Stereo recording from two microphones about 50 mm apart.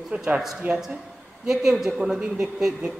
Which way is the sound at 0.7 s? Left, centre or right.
Right.